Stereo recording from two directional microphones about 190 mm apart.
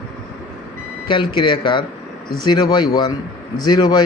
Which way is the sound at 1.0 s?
25° left (ahead or behind).